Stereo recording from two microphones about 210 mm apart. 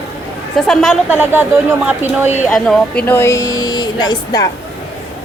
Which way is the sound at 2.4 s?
Centre (ahead or behind).